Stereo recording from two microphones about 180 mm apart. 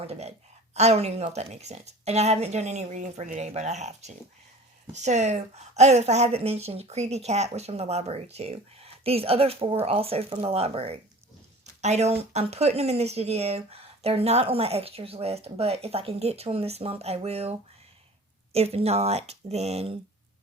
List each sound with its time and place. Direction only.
0.0 s a woman's voice: 35° right (ahead or behind)
11.6 s a sound: 40° right (ahead or behind)
12.3 s a woman's voice: 35° right (ahead or behind)